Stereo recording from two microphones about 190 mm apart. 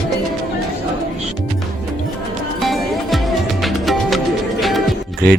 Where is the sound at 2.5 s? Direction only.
Centre (ahead or behind).